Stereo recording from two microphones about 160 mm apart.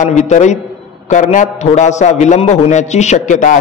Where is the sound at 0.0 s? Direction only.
50° left (ahead or behind).